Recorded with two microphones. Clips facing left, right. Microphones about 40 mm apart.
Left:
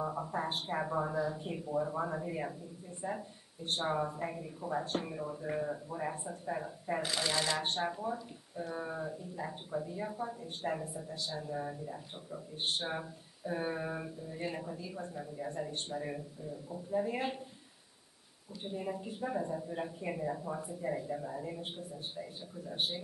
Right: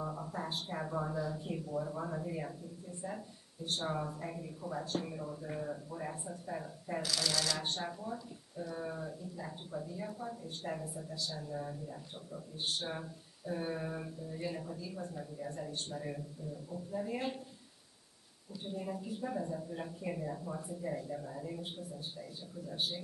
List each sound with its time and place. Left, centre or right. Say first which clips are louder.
0.0 s speech: left 4 dB; left
18.6 s speech: left 2 dB; left
21.5 s speech: left 1 dB; left